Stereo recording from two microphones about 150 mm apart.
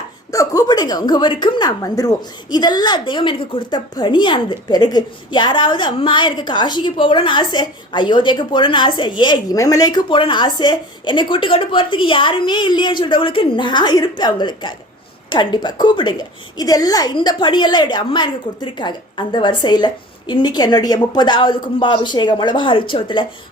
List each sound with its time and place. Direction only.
0.3 s a woman's voice: 25° left (ahead or behind)